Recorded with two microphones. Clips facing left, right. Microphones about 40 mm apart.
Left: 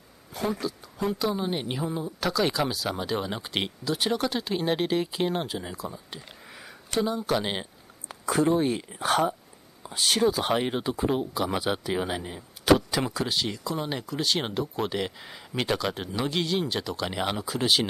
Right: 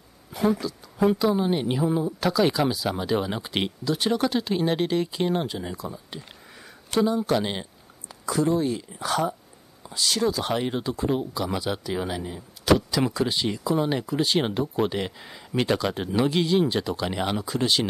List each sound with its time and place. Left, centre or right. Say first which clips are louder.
0.3 s speech: right 5 dB; centre
8.1 s speech: even; left
10.2 s speech: left 1 dB; centre
11.3 s speech: even; left
12.6 s speech: even; left
13.0 s speech: right 4 dB; centre